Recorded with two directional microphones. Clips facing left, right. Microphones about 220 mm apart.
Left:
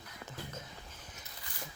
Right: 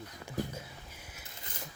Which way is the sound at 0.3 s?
10° right (ahead or behind).